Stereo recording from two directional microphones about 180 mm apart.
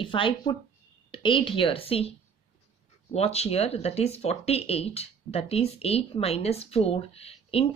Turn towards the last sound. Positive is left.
turn(degrees=35)  # may be behind; listen again after turning